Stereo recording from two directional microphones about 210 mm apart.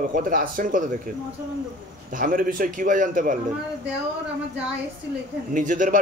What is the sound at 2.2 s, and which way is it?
Speech, 40° right (ahead or behind).